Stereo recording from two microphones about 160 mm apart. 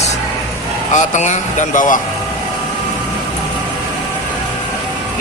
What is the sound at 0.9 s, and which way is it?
Speech, 50° left (ahead or behind).